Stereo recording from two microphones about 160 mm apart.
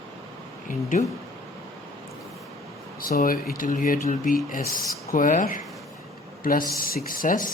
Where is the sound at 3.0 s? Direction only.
65° left (ahead or behind).